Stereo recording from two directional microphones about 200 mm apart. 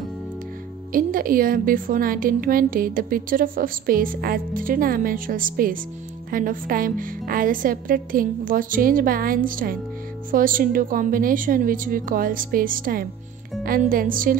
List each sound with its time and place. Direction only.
0.9 s a woman's voice: 45° right (ahead or behind)